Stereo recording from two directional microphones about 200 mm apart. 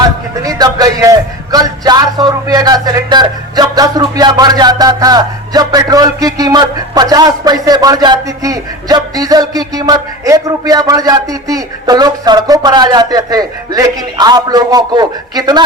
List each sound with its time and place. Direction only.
0.4 s a man's voice: 20° right (ahead or behind)